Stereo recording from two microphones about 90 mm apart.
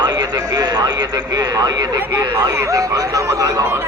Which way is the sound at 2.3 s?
45° right (ahead or behind).